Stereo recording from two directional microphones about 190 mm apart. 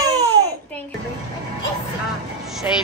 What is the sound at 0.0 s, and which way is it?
Babbling, 20° right (ahead or behind).